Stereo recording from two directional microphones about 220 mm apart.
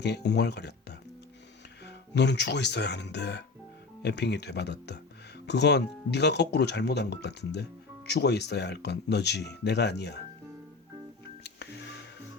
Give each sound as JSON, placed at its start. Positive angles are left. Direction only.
{"t": 0.0, "sound": "speech", "side_deg": 50}
{"t": 11.4, "sound": "music", "side_deg": 50}